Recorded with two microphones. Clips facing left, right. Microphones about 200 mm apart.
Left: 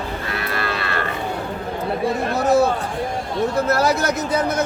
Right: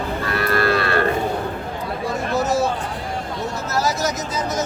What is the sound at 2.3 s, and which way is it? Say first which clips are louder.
Speech: left 3 dB; 60° left (ahead or behind).